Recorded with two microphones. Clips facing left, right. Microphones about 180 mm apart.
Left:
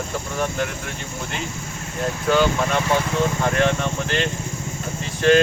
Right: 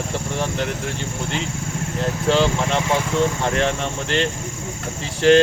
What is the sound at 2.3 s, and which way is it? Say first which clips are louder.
Speech: even; 25° right (ahead or behind).